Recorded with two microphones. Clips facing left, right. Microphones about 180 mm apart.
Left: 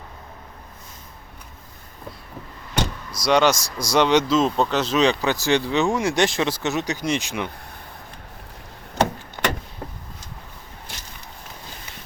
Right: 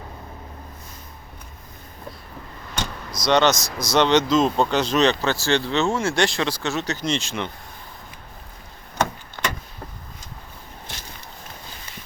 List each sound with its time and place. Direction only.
3.2 s speech: 10° left (ahead or behind)
9.4 s vehicle: 20° left (ahead or behind)